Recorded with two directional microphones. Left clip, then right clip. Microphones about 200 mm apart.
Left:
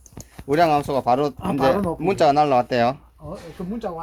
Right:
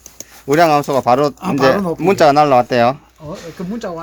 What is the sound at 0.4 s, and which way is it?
Speech, 25° right (ahead or behind).